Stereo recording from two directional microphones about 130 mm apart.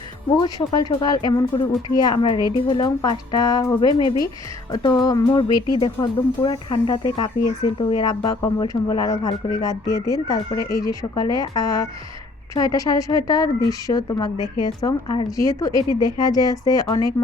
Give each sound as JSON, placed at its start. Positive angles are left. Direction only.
{"t": 0.4, "sound": "a woman's voice", "side_deg": 35}
{"t": 2.8, "sound": "speech", "side_deg": 30}
{"t": 3.8, "sound": "a woman's voice", "side_deg": 40}
{"t": 4.7, "sound": "a woman's voice", "side_deg": 30}
{"t": 15.3, "sound": "speech", "side_deg": 25}